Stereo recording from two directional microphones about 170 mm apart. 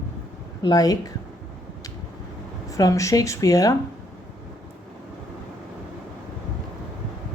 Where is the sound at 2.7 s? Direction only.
20° left (ahead or behind).